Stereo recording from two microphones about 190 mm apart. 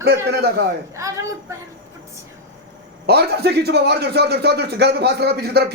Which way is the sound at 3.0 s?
60° right (ahead or behind).